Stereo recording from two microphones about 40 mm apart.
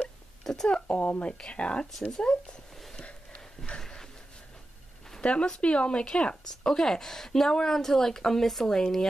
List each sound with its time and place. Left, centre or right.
0.4 s a sound: centre
0.7 s speech: left
1.0 s speech: left
1.4 s speech: left
2.0 s speech: centre
3.7 s a sound: centre
5.2 s speech: left
6.6 s speech: centre